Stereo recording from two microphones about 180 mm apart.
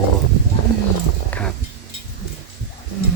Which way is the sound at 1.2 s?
10° left (ahead or behind).